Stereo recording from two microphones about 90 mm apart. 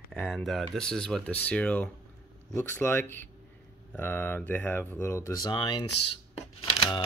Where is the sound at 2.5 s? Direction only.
25° left (ahead or behind).